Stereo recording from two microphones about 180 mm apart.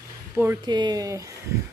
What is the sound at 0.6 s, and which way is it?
Speech, 25° right (ahead or behind).